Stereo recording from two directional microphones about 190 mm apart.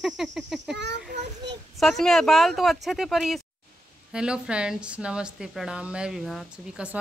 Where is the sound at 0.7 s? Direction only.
65° right (ahead or behind).